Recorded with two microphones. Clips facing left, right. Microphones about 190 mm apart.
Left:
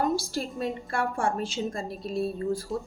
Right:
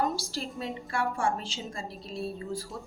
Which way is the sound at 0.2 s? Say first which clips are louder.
Left 5 dB; 50° left (ahead or behind).